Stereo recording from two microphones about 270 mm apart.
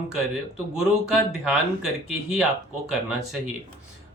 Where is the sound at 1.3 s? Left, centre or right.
Centre.